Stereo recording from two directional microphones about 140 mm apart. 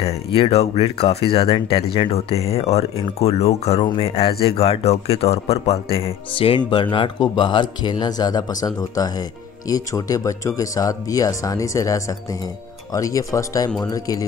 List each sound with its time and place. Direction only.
0.0 s speech: 45° left (ahead or behind); by 14.2 s 25° left (ahead or behind)